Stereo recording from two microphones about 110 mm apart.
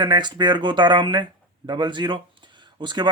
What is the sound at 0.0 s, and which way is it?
Speech, 45° right (ahead or behind).